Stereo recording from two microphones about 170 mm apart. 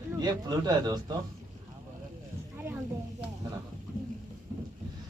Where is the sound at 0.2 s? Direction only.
25° right (ahead or behind).